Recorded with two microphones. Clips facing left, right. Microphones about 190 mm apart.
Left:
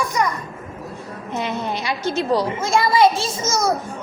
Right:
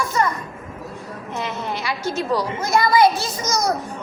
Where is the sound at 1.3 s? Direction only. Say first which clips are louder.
Left 3 dB; 20° left (ahead or behind).